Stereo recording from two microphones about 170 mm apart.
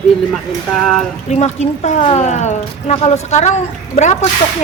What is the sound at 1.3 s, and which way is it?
Speech, 45° left (ahead or behind).